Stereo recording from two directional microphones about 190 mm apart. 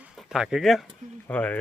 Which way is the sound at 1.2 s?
10° left (ahead or behind).